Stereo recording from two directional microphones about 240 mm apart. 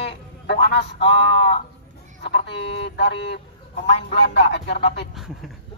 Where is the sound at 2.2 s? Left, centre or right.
Left.